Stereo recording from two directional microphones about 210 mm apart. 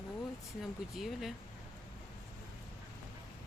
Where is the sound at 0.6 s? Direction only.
Centre (ahead or behind).